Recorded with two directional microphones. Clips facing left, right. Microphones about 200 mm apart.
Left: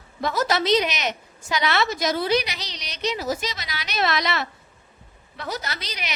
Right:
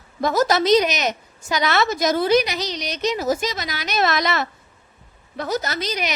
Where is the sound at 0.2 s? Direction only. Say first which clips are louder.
Right 5 dB; 45° right (ahead or behind).